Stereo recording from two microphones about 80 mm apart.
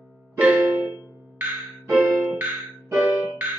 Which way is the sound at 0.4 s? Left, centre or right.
Centre.